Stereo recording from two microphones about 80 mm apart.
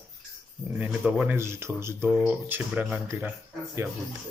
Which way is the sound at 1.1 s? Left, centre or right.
Centre.